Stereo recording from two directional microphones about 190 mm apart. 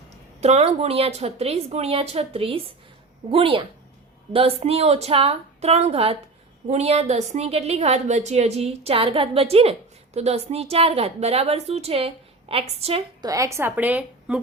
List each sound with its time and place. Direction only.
0.4 s a woman's voice: 35° right (ahead or behind)
13.2 s a woman's voice: 15° right (ahead or behind)